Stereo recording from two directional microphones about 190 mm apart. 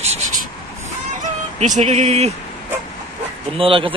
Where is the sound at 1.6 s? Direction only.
40° right (ahead or behind).